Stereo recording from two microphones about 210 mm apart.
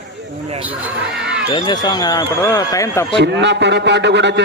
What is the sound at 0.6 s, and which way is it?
Basketball bounce, 5° right (ahead or behind).